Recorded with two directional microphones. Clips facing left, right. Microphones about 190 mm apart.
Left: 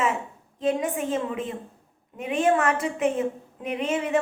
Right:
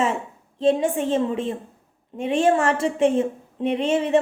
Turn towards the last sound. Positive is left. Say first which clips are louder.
# right 5 dB
turn(degrees=-30)  # may be behind; listen again after turning